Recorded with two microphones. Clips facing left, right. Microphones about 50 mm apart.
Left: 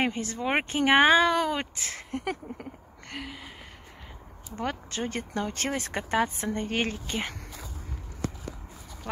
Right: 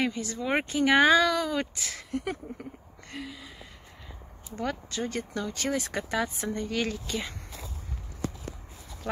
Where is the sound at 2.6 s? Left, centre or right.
Left.